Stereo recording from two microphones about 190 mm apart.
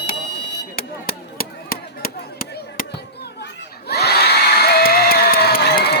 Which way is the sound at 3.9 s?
55° left (ahead or behind).